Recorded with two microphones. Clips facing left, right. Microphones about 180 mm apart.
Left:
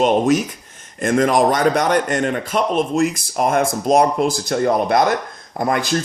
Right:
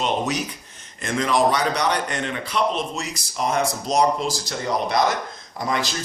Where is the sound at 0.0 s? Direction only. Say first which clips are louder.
Left 9 dB; 50° left (ahead or behind).